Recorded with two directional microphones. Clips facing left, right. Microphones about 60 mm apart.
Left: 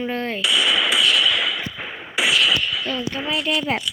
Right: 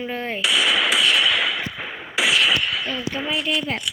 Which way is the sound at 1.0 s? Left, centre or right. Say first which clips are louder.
Even; right.